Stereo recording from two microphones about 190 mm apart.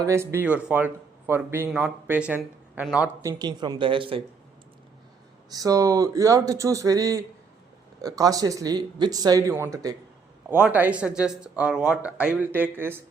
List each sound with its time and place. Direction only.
0.0 s speech: 15° right (ahead or behind)
3.2 s speech: 20° right (ahead or behind)
5.5 s speech: 20° right (ahead or behind)